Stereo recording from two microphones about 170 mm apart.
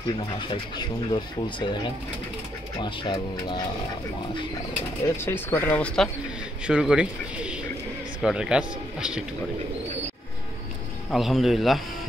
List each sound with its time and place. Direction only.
0.4 s speech: 30° left (ahead or behind)
2.8 s speech: 25° left (ahead or behind)
5.1 s speech: 15° left (ahead or behind)
6.7 s speech: 5° right (ahead or behind)
11.1 s speech: centre (ahead or behind)